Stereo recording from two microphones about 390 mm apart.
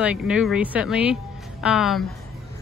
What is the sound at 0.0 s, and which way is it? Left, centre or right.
Speech, centre.